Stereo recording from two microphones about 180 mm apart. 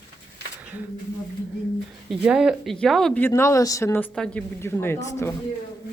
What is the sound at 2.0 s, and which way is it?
Speech, 5° right (ahead or behind).